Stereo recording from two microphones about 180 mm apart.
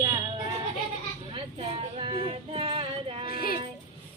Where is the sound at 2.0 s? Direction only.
30° right (ahead or behind).